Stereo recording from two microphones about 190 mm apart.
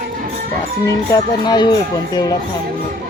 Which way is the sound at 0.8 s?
20° left (ahead or behind).